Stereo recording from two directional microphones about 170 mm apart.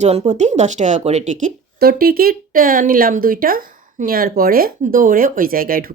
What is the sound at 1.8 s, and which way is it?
Speech, 60° right (ahead or behind).